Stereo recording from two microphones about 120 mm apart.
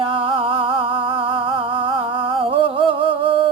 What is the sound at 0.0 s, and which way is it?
Music, 50° right (ahead or behind).